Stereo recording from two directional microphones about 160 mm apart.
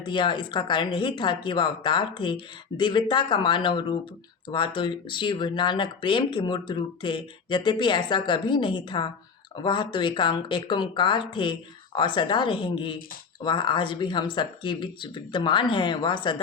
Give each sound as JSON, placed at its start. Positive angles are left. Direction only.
{"t": 0.0, "sound": "speech", "side_deg": 30}